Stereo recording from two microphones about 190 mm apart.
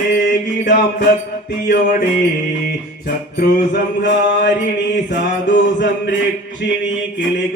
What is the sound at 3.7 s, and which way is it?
Mantra, 65° left (ahead or behind).